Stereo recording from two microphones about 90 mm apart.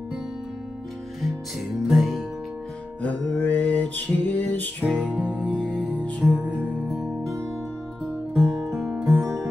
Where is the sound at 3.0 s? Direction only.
15° left (ahead or behind).